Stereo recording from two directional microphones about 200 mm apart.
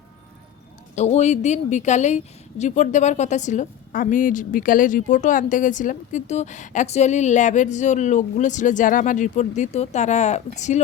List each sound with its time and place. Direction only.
0.9 s a woman's voice: 35° left (ahead or behind)